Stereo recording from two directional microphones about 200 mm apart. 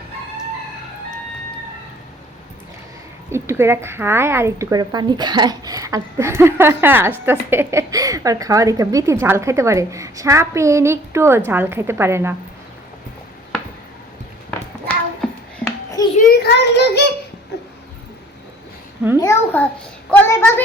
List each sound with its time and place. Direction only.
3.2 s speech: 10° right (ahead or behind)
14.8 s child singing: 10° left (ahead or behind)
16.4 s child singing: 55° left (ahead or behind)
19.2 s a child's voice: 10° left (ahead or behind)